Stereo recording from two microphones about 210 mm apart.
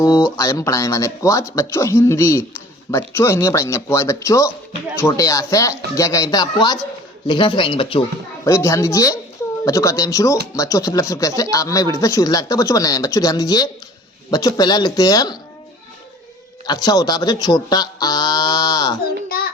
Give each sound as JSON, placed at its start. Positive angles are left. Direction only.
{"t": 0.3, "sound": "speech", "side_deg": 15}
{"t": 8.4, "sound": "speech", "side_deg": 15}
{"t": 16.6, "sound": "speech", "side_deg": 20}